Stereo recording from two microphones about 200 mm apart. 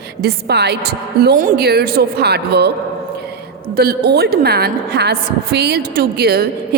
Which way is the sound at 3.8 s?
50° right (ahead or behind).